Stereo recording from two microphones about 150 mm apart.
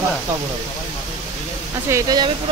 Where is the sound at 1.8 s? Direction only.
25° right (ahead or behind).